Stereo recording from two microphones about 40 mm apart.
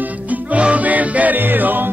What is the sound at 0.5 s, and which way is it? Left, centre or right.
Music, right.